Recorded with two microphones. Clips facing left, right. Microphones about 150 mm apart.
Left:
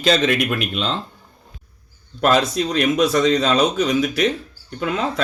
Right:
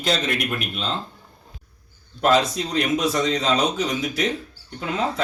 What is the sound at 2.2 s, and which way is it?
Speech, 65° left (ahead or behind).